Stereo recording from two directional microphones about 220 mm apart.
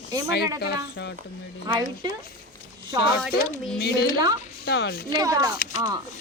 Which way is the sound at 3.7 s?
45° left (ahead or behind).